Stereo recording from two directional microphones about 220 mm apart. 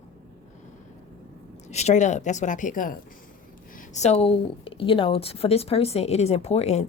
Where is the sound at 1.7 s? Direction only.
30° left (ahead or behind).